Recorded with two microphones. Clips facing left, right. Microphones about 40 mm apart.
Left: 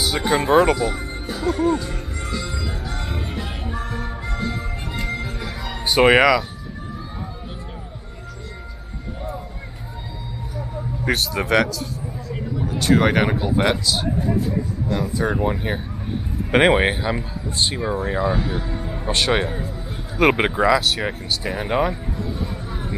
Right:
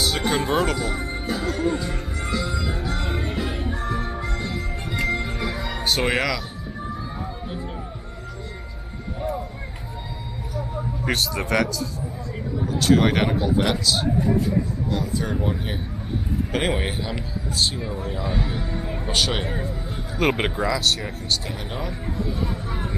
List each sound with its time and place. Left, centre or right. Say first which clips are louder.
0.0 s speech: left 2 dB; centre
2.3 s music: right 3 dB; centre
5.0 s music: right 5 dB; centre
5.9 s speech: left 9 dB; centre
11.1 s speech: left 3 dB; centre
12.6 s speech: left 1 dB; centre
15.4 s speech: left 4 dB; centre
16.5 s speech: left 10 dB; left
17.5 s speech: left 3 dB; centre
18.2 s speech: left 5 dB; centre
21.5 s speech: left 10 dB; left
22.7 s music: even; centre